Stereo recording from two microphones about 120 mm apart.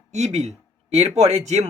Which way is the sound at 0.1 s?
65° right (ahead or behind).